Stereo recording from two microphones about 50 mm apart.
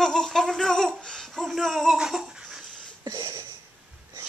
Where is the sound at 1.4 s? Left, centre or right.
Centre.